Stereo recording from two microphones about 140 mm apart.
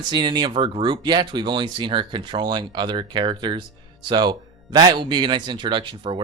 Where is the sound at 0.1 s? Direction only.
35° right (ahead or behind).